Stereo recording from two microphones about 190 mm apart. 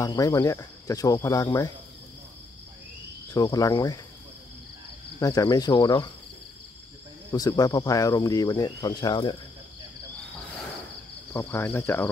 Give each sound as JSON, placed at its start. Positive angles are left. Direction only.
{"t": 0.0, "sound": "speech", "side_deg": 20}
{"t": 3.3, "sound": "speech", "side_deg": 20}
{"t": 5.2, "sound": "speech", "side_deg": 20}
{"t": 7.2, "sound": "speech", "side_deg": 20}
{"t": 11.3, "sound": "speech", "side_deg": 10}